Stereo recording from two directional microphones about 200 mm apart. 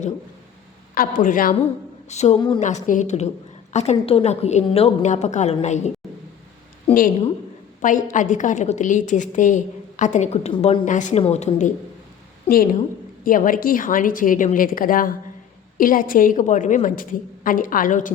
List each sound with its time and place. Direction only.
0.9 s a woman's voice: 40° left (ahead or behind); by 2.6 s 25° left (ahead or behind)
2.6 s a woman's voice: 35° left (ahead or behind)
7.8 s a woman's voice: 40° left (ahead or behind)
13.2 s a woman's voice: 45° left (ahead or behind)